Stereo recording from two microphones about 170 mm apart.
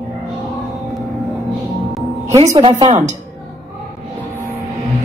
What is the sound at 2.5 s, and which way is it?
Speech, 25° right (ahead or behind).